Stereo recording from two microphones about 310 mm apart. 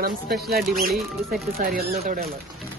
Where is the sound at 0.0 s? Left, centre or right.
Right.